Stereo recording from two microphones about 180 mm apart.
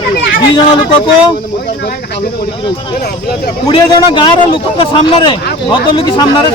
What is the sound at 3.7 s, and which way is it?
A man's voice, 25° left (ahead or behind).